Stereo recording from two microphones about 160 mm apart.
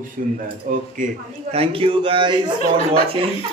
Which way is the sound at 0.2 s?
60° right (ahead or behind).